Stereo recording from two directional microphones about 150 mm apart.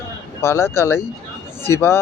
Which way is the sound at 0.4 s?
15° left (ahead or behind).